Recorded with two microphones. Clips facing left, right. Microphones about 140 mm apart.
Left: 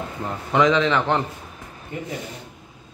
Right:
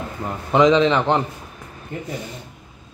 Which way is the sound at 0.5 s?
20° right (ahead or behind).